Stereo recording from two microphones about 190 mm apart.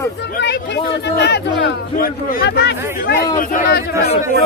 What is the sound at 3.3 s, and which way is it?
Speech, 45° left (ahead or behind).